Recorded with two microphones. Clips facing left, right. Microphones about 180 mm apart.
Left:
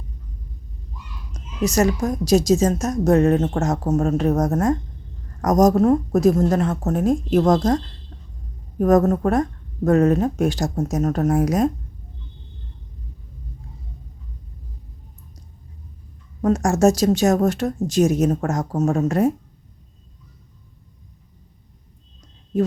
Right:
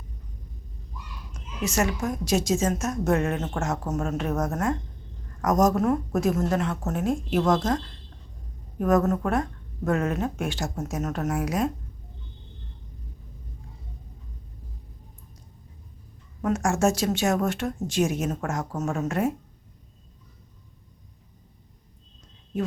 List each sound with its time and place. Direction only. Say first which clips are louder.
1.3 s a woman's voice: left 8 dB; 40° left (ahead or behind)
8.8 s a woman's voice: left 6 dB; 40° left (ahead or behind)
16.4 s a woman's voice: left 6 dB; 35° left (ahead or behind)